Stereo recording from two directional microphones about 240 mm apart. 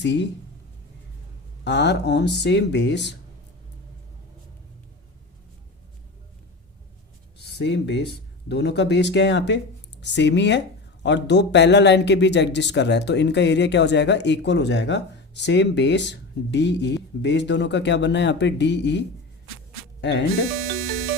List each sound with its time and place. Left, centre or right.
0.0 s a man's voice: left
1.6 s a man's voice: left
7.5 s a man's voice: left